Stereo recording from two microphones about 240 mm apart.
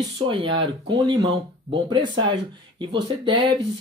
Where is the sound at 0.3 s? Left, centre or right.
Right.